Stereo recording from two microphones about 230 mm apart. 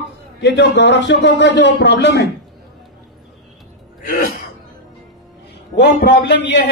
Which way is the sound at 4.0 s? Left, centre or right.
Left.